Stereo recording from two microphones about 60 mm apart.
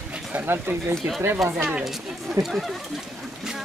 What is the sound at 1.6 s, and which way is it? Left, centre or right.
Speech, centre.